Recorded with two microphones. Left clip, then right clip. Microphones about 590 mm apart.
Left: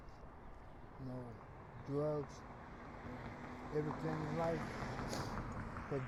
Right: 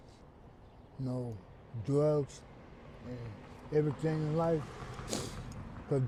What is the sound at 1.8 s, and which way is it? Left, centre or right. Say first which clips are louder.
Speech: right 10 dB; right.